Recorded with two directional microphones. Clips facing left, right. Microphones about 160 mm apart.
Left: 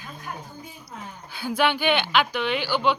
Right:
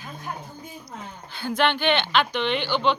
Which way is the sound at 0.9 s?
10° left (ahead or behind).